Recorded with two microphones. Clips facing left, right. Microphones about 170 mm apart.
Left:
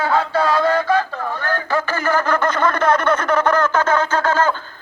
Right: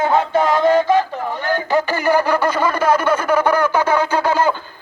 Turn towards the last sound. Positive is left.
turn(degrees=-15)  # may be behind; listen again after turning